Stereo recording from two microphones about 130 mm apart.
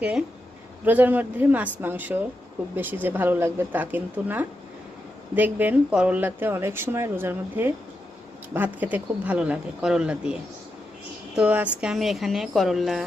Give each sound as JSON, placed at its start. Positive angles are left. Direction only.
{"t": 0.0, "sound": "speech", "side_deg": -5}